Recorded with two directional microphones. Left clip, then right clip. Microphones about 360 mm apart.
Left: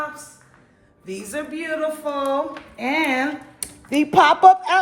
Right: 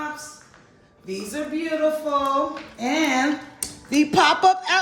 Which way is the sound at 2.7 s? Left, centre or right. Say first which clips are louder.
Left 1 dB; centre.